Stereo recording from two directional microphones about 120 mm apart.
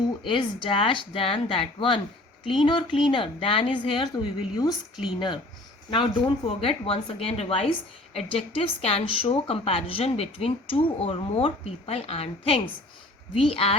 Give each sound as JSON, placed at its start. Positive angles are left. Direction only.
{"t": 0.3, "sound": "speech", "side_deg": 45}
{"t": 5.9, "sound": "speech", "side_deg": 45}